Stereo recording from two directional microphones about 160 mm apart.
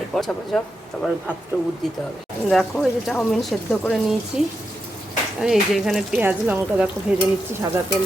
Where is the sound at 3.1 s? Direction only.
Centre (ahead or behind).